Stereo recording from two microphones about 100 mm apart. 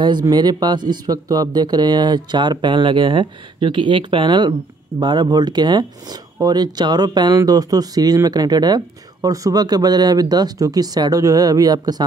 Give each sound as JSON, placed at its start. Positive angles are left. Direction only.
{"t": 0.0, "sound": "speech", "side_deg": -45}